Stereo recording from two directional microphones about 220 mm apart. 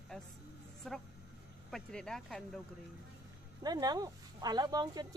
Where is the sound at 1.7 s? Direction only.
5° left (ahead or behind).